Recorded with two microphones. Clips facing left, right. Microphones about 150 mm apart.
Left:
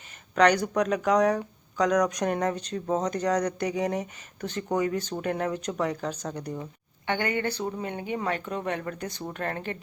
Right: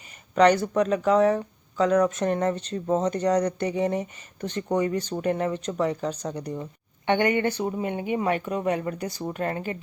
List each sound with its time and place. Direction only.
0.3 s speech: 5° right (ahead or behind)
7.1 s speech: 20° right (ahead or behind)